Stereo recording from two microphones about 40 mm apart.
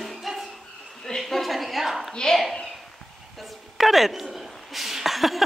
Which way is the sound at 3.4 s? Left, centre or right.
Centre.